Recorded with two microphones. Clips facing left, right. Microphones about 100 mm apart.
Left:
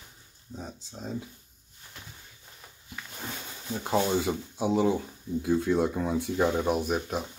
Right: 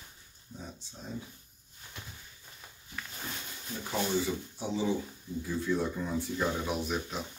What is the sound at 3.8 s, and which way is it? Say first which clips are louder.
Speech: left 5 dB; 60° left (ahead or behind).